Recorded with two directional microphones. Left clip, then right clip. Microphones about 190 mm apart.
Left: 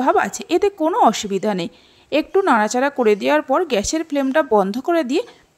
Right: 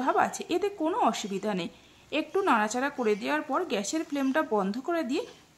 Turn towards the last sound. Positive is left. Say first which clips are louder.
# left 11 dB
turn(degrees=35)  # may be behind; listen again after turning